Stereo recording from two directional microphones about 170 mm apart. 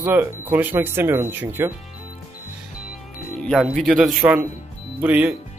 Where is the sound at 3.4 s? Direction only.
Centre (ahead or behind).